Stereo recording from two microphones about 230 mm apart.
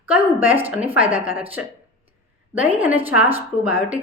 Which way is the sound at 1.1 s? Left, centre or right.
Right.